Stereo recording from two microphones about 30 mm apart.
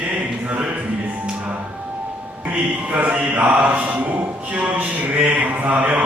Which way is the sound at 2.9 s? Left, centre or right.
Right.